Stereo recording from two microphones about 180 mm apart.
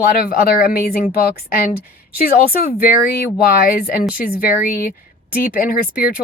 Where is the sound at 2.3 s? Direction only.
55° left (ahead or behind).